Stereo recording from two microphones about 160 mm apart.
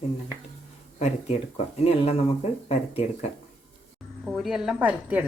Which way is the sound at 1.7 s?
40° left (ahead or behind).